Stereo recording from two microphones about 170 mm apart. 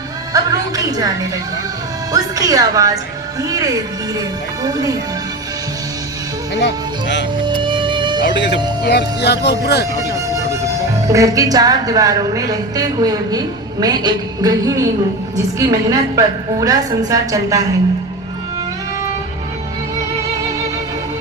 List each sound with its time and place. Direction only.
0.3 s music: 20° right (ahead or behind)
0.9 s a woman's voice: 20° right (ahead or behind)
6.5 s speech: 90° left
7.4 s music: 30° right (ahead or behind)
8.2 s speech: 85° left
10.2 s a woman's voice: 20° right (ahead or behind)